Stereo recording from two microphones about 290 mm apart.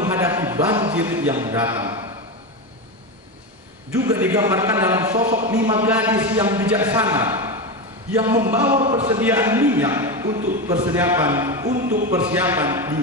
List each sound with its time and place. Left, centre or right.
0.0 s speech: centre
3.9 s a man's voice: centre
8.8 s speech: right
9.1 s a man's voice: centre
11.7 s speech: right
12.1 s a man's voice: centre